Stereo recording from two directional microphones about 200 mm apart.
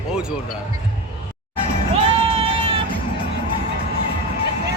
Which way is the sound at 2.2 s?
30° right (ahead or behind).